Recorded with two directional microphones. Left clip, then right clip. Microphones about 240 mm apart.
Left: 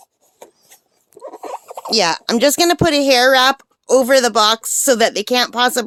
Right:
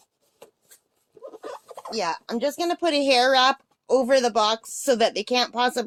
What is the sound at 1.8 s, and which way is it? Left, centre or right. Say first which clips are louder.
Speech: left 11 dB; left.